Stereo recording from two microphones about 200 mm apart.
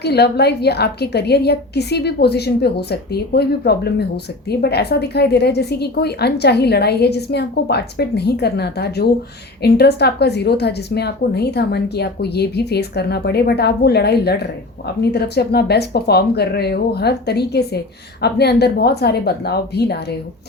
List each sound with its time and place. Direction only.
0.0 s a woman's voice: 55° left (ahead or behind)